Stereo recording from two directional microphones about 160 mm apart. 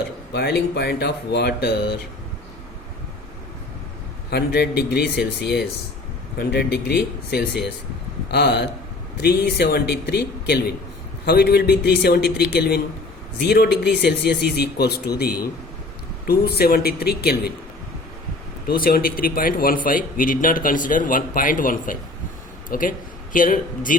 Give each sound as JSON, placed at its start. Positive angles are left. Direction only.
{"t": 0.3, "sound": "speech", "side_deg": 90}
{"t": 4.3, "sound": "a man's voice", "side_deg": 90}
{"t": 16.2, "sound": "speech", "side_deg": 80}
{"t": 18.7, "sound": "a man's voice", "side_deg": 70}